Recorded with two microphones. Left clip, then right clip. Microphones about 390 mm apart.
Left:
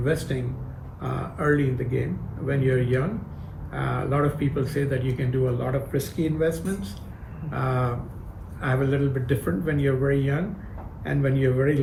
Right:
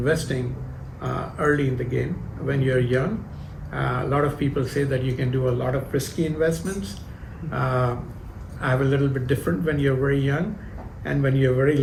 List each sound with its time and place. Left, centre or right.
0.0 s speech: right